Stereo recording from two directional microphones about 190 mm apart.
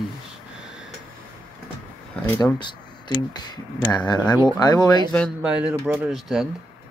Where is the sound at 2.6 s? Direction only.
25° left (ahead or behind).